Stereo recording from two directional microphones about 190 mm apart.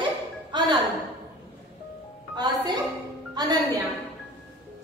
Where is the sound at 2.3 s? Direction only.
20° right (ahead or behind).